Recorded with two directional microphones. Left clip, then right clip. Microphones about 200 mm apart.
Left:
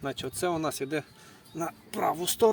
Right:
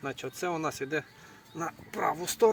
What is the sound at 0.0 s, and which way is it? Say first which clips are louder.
Speech: left 3 dB; 40° left (ahead or behind).